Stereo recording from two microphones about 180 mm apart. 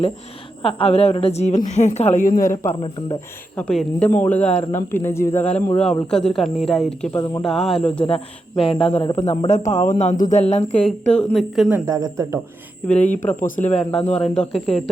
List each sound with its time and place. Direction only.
0.6 s a woman's voice: 30° left (ahead or behind); by 2.5 s 50° left (ahead or behind)
3.5 s speech: 5° left (ahead or behind)
7.1 s speech: 20° left (ahead or behind)
7.4 s a woman's voice: centre (ahead or behind)
8.0 s a woman's voice: 30° left (ahead or behind)
9.6 s a woman's voice: 45° left (ahead or behind)
10.8 s a woman's voice: 5° left (ahead or behind)
11.9 s speech: 20° right (ahead or behind)
13.0 s a woman's voice: 40° left (ahead or behind)
13.7 s a woman's voice: 5° left (ahead or behind)